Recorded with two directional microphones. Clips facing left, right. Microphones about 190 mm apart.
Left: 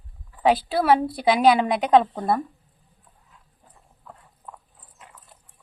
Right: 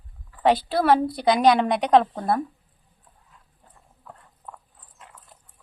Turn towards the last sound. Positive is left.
turn(degrees=0)  # may be behind; listen again after turning